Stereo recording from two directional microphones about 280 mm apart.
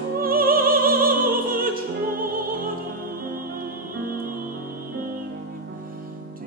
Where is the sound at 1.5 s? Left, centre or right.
Right.